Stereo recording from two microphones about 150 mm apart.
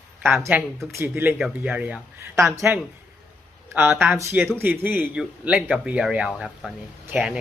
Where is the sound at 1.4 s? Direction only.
5° right (ahead or behind).